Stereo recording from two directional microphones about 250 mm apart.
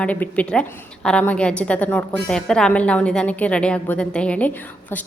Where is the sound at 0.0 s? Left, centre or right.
Centre.